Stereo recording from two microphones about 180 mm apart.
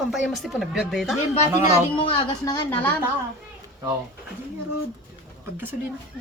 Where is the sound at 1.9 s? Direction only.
30° left (ahead or behind).